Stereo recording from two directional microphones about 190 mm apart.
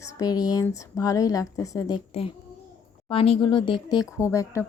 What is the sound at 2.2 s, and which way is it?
A child's voice, 30° left (ahead or behind).